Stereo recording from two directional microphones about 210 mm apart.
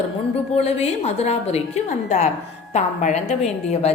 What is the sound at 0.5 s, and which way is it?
A woman's voice, 30° left (ahead or behind).